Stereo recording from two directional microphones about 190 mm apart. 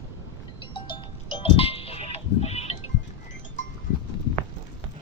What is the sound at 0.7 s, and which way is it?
Goat, 25° left (ahead or behind).